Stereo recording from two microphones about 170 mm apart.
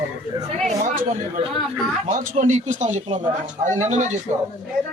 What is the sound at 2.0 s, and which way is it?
A man's voice, 45° right (ahead or behind).